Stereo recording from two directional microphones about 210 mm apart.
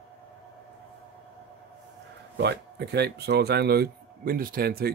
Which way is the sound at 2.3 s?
50° right (ahead or behind).